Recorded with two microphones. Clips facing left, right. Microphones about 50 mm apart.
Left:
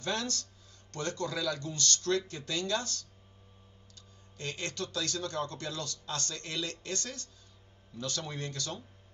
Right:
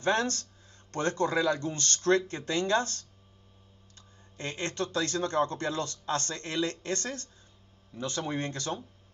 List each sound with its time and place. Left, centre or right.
0.0 s a man's voice: right
4.4 s a man's voice: right